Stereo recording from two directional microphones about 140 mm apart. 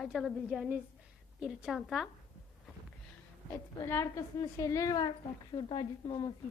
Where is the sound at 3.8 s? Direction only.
20° left (ahead or behind); by 6.3 s 35° left (ahead or behind).